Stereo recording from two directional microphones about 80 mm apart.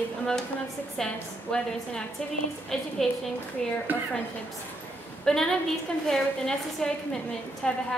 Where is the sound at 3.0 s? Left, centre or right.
Centre.